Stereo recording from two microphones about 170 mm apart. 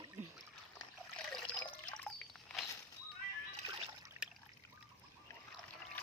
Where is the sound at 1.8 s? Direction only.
5° left (ahead or behind).